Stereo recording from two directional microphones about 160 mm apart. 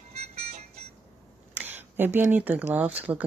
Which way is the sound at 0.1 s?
40° right (ahead or behind).